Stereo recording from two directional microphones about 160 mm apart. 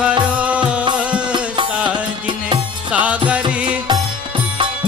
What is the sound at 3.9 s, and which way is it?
Music, 30° right (ahead or behind).